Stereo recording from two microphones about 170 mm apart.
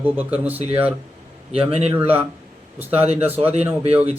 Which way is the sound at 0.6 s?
35° right (ahead or behind).